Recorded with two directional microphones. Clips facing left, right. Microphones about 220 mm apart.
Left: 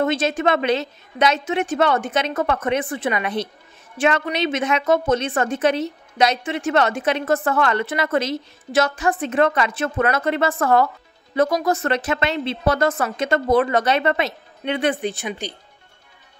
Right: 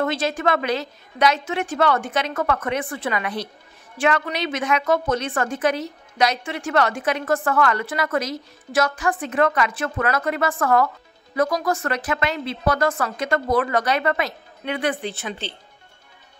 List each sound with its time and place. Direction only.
0.0 s a woman's voice: 20° left (ahead or behind)